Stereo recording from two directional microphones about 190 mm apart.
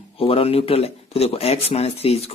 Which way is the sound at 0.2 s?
30° left (ahead or behind).